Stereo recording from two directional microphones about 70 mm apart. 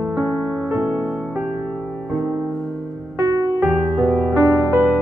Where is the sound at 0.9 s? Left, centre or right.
Centre.